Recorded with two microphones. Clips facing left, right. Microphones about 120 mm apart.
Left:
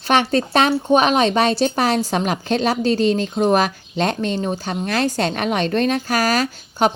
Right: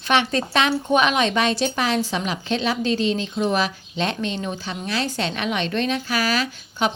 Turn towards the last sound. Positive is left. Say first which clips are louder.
# left 5 dB
turn(degrees=45)  # may be behind; listen again after turning